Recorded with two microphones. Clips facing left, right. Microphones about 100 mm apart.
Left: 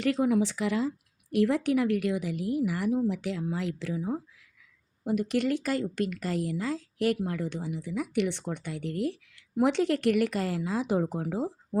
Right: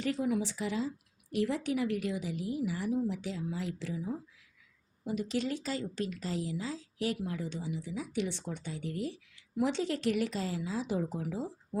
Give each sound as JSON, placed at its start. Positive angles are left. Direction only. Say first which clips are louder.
{"t": 0.0, "sound": "speech", "louder": "left 6 dB", "side_deg": 75}